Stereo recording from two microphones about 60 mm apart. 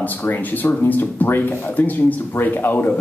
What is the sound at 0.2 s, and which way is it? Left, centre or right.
Speech, left.